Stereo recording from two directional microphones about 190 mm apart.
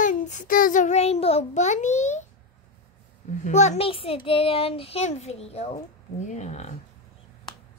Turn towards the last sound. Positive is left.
turn(degrees=35)  # may be behind; listen again after turning